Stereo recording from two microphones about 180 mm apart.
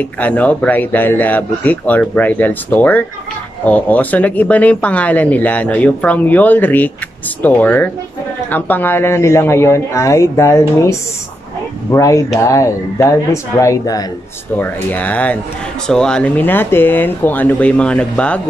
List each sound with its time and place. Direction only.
0.0 s speech: 10° left (ahead or behind)
11.9 s speech: 15° left (ahead or behind)